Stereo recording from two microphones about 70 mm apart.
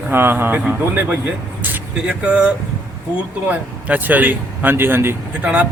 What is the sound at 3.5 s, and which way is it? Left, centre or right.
A man's voice, right.